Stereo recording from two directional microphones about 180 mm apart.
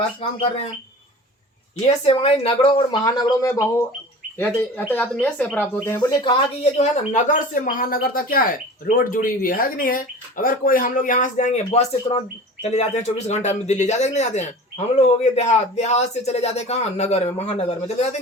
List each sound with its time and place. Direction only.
0.2 s speech: 35° left (ahead or behind)
1.9 s speech: 35° left (ahead or behind); by 6.0 s 10° left (ahead or behind)
6.0 s speech: 25° left (ahead or behind)
6.7 s speech: 40° left (ahead or behind)